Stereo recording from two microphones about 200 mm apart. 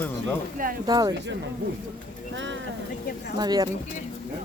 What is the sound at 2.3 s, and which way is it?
Speech, 65° right (ahead or behind).